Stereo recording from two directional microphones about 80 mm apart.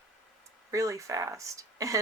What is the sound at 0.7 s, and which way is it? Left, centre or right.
Speech, right.